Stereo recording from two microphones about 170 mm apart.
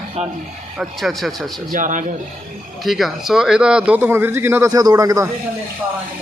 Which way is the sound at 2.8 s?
Centre (ahead or behind).